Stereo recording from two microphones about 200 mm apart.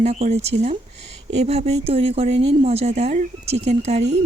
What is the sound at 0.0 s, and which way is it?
Speech, 35° right (ahead or behind).